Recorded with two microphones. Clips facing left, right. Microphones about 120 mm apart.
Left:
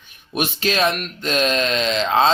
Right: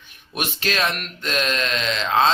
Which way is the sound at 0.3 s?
20° left (ahead or behind).